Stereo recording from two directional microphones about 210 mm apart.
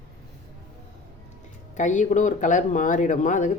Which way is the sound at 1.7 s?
35° left (ahead or behind).